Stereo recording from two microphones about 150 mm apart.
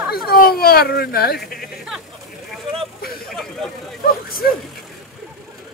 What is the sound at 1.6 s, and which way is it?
Music, centre (ahead or behind).